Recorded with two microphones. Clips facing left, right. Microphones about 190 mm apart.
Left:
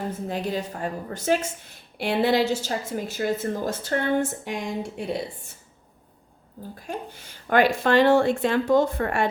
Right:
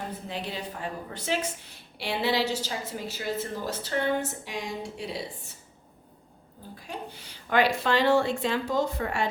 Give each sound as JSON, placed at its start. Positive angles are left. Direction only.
{"t": 0.3, "sound": "a woman's voice", "side_deg": 45}
{"t": 6.7, "sound": "a woman's voice", "side_deg": 50}